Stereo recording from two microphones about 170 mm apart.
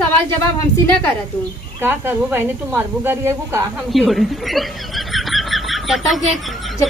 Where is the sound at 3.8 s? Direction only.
Centre (ahead or behind).